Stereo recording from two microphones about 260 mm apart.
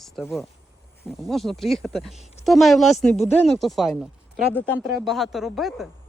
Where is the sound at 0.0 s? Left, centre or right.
Centre.